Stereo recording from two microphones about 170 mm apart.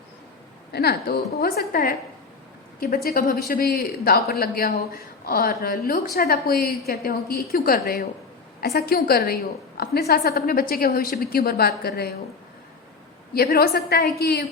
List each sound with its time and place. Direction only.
0.7 s speech: 65° left (ahead or behind)
13.3 s a woman's voice: 65° left (ahead or behind)